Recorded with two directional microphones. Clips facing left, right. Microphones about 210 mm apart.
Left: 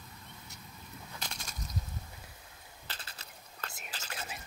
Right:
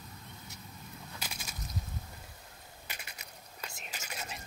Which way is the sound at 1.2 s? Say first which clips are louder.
Even; 5° right (ahead or behind).